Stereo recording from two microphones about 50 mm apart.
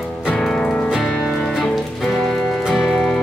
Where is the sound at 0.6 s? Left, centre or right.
Centre.